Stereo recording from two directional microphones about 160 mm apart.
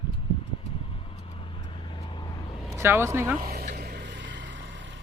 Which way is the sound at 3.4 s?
75° right (ahead or behind).